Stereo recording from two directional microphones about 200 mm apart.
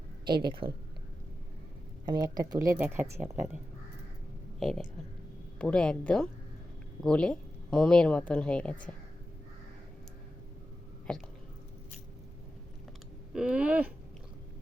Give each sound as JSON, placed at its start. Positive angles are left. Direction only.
{"t": 0.3, "sound": "speech", "side_deg": -25}
{"t": 2.0, "sound": "speech", "side_deg": -20}
{"t": 4.6, "sound": "speech", "side_deg": 0}
{"t": 11.1, "sound": "speech", "side_deg": 5}
{"t": 13.3, "sound": "speech", "side_deg": -5}